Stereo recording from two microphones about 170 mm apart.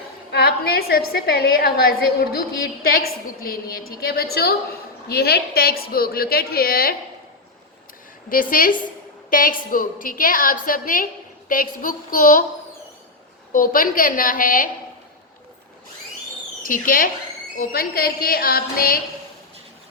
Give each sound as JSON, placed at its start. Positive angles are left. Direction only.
{"t": 0.3, "sound": "a woman's voice", "side_deg": 70}
{"t": 8.3, "sound": "a woman's voice", "side_deg": 55}
{"t": 13.5, "sound": "a woman's voice", "side_deg": 55}
{"t": 16.6, "sound": "a woman's voice", "side_deg": 55}